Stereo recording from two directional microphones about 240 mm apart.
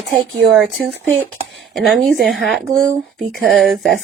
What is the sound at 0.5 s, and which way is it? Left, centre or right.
Speech, centre.